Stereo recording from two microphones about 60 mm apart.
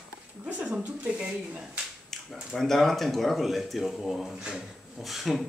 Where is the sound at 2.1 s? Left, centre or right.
Centre.